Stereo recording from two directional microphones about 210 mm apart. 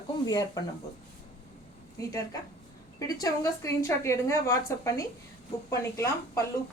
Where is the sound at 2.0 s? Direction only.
15° left (ahead or behind).